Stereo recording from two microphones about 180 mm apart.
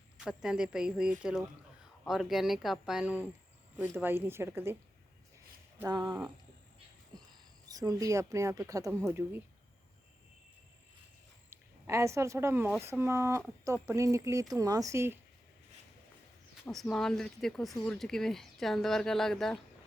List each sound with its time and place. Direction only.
0.2 s speech: 5° right (ahead or behind)
5.9 s speech: 25° right (ahead or behind)
7.1 s a sound: 25° right (ahead or behind)
7.7 s speech: 20° right (ahead or behind)
11.9 s speech: 15° right (ahead or behind)
16.6 s speech: 5° left (ahead or behind)